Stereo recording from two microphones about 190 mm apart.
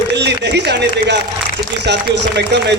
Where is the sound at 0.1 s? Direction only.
65° right (ahead or behind).